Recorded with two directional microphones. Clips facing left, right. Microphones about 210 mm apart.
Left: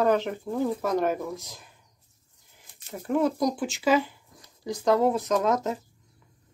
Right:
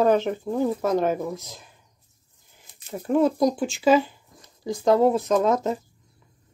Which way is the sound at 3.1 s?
30° right (ahead or behind).